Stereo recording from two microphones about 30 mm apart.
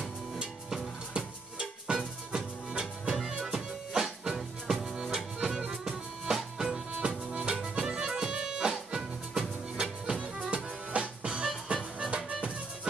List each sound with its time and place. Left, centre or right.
1.1 s music: right
3.4 s music: centre
7.0 s music: right
7.6 s music: right
10.5 s music: right